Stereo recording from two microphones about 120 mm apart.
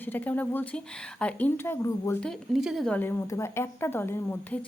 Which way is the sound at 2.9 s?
15° left (ahead or behind).